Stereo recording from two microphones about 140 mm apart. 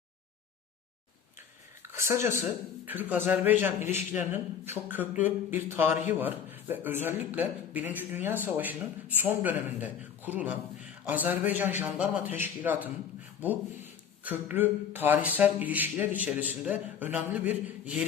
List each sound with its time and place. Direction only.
2.0 s a man's voice: 20° right (ahead or behind)
14.3 s a man's voice: 10° right (ahead or behind)